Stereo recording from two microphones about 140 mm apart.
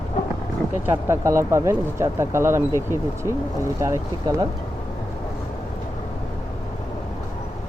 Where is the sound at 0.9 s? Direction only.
20° right (ahead or behind).